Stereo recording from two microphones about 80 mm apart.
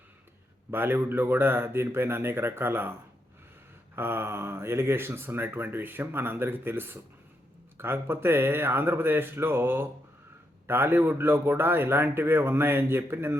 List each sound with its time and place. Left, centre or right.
0.7 s speech: right
3.9 s speech: right